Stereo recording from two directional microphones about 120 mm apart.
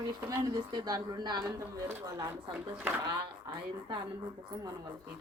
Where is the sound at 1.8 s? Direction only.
25° right (ahead or behind).